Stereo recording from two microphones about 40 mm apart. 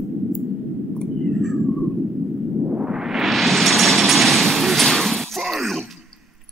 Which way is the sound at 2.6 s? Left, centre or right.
Centre.